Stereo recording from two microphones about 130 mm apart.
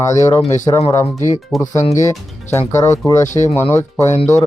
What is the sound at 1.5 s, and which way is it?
Speech, centre (ahead or behind).